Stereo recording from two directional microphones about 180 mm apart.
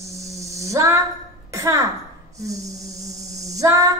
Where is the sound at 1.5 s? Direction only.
15° right (ahead or behind).